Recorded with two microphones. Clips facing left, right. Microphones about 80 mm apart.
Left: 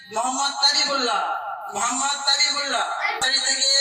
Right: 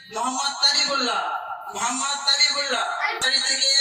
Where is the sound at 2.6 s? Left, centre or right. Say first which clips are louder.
Left 1 dB; left.